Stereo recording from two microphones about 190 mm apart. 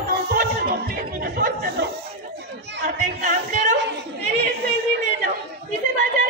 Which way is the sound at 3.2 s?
40° right (ahead or behind).